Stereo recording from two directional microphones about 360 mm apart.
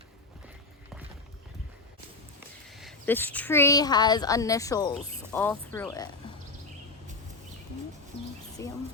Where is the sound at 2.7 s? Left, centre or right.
Centre.